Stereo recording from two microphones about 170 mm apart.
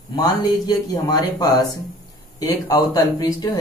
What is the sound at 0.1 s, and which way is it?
A man's voice, 25° left (ahead or behind).